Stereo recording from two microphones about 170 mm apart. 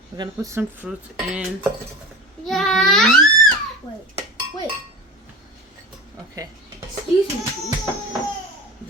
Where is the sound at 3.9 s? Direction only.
20° left (ahead or behind).